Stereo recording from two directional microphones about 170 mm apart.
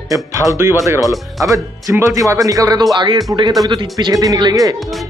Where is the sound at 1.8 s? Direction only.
20° right (ahead or behind).